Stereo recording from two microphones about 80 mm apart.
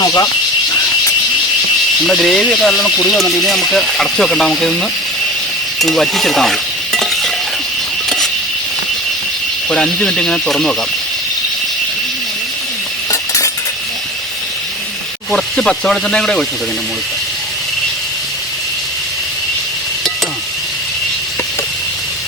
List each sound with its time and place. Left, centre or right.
0.0 s speech: left
2.0 s speech: centre
7.0 s stir: centre
9.6 s speech: centre
13.1 s cutlery: left
15.3 s speech: centre